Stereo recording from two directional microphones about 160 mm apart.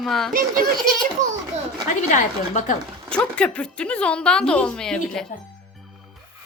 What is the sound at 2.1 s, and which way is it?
Speech, 50° left (ahead or behind).